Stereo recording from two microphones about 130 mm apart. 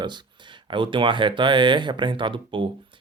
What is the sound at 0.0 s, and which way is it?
Speech, 35° right (ahead or behind).